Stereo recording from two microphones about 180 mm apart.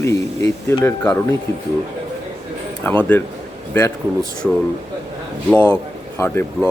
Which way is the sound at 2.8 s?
10° left (ahead or behind).